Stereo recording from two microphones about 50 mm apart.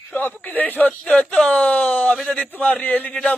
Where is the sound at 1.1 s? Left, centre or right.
Left.